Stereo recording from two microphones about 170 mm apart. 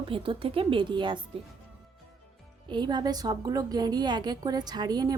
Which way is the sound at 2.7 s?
25° right (ahead or behind).